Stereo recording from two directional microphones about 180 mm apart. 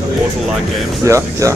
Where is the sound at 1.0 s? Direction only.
15° right (ahead or behind).